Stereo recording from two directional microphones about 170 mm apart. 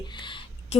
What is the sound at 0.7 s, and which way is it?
Speech, 40° left (ahead or behind).